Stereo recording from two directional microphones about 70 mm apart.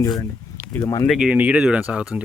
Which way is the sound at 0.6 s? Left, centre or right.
Left.